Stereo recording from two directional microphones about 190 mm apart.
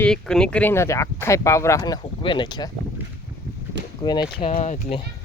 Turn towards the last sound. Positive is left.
turn(degrees=30)  # may be behind; listen again after turning